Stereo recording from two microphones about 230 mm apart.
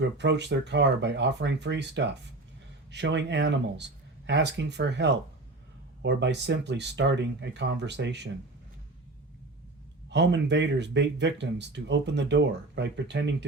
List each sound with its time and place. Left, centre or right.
0.0 s speech: right
10.1 s speech: right